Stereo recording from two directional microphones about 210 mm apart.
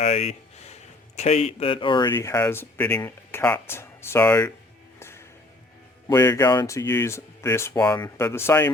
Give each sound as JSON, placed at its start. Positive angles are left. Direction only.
{"t": 0.0, "sound": "a man's voice", "side_deg": 30}
{"t": 4.9, "sound": "music", "side_deg": 10}
{"t": 6.1, "sound": "speech", "side_deg": 15}